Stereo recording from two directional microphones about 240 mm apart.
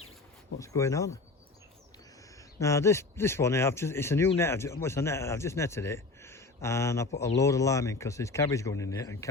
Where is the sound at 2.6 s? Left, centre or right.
Centre.